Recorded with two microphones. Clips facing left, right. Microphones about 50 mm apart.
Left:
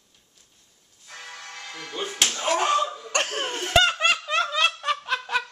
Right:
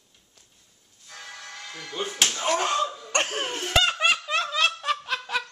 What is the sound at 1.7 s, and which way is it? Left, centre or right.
Music, left.